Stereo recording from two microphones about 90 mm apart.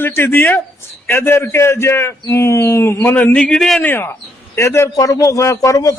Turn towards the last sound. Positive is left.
turn(degrees=40)  # may be behind; listen again after turning